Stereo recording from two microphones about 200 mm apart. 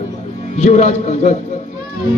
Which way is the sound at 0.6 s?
35° left (ahead or behind).